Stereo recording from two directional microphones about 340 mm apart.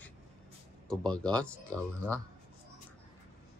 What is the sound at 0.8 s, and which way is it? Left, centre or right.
Speech, centre.